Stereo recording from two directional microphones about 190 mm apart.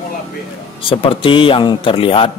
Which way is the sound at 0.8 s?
25° left (ahead or behind).